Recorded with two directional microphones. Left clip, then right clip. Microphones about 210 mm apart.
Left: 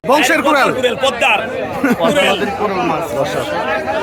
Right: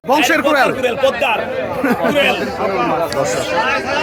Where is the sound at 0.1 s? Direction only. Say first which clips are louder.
Left 1 dB; 5° left (ahead or behind).